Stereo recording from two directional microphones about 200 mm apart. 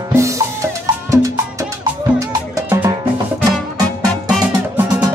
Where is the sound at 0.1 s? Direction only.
15° right (ahead or behind).